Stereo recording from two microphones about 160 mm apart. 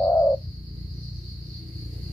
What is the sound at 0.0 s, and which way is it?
Bird, 10° left (ahead or behind).